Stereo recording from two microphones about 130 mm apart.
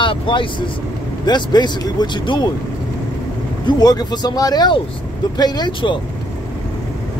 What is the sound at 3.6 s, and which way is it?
Speech, 30° left (ahead or behind).